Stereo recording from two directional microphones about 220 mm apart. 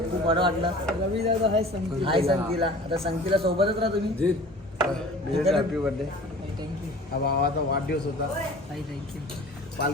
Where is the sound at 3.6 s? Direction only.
25° right (ahead or behind).